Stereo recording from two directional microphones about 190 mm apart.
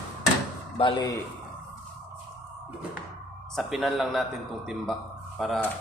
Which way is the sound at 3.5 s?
Centre (ahead or behind).